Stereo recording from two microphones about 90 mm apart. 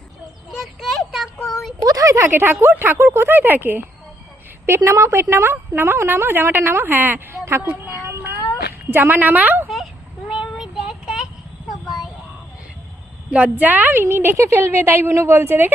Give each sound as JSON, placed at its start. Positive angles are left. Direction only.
{"t": 0.6, "sound": "a sound", "side_deg": 0}
{"t": 1.8, "sound": "a woman's voice", "side_deg": -40}
{"t": 8.0, "sound": "child singing", "side_deg": -30}
{"t": 8.9, "sound": "a woman's voice", "side_deg": -20}
{"t": 9.6, "sound": "child singing", "side_deg": -5}
{"t": 13.3, "sound": "a woman's voice", "side_deg": -15}